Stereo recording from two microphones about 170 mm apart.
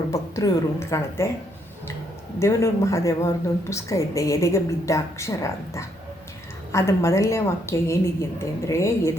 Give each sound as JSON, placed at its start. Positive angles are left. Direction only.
{"t": 0.1, "sound": "a woman's voice", "side_deg": 20}
{"t": 2.4, "sound": "a woman's voice", "side_deg": 15}